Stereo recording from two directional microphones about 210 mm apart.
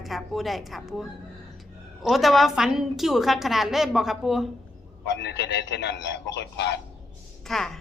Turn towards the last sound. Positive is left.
turn(degrees=0)  # may be behind; listen again after turning